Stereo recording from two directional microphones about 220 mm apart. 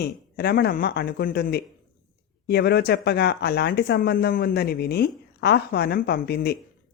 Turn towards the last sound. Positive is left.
turn(degrees=45)  # may be behind; listen again after turning